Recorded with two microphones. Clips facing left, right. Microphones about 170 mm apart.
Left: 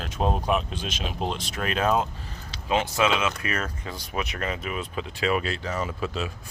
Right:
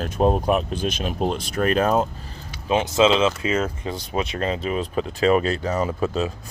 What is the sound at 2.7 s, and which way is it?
Speech, 20° right (ahead or behind).